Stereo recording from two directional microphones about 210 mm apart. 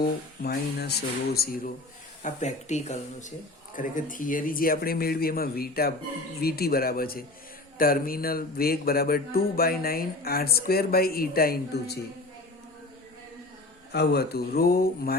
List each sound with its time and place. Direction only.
0.0 s speech: 45° left (ahead or behind)
2.2 s speech: 35° left (ahead or behind)
13.9 s speech: 50° left (ahead or behind)